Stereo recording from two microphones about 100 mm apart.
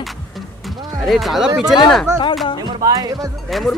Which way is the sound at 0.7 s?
45° right (ahead or behind).